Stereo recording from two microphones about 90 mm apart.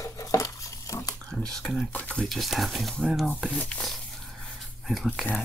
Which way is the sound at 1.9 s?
15° left (ahead or behind).